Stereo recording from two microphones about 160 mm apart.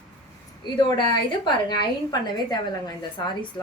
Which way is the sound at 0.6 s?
25° left (ahead or behind).